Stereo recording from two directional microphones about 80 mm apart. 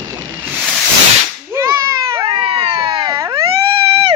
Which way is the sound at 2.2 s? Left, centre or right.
Right.